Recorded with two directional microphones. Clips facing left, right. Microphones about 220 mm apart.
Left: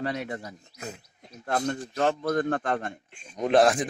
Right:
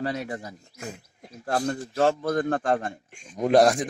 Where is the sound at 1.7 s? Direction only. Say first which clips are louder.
Right 4 dB; 35° right (ahead or behind).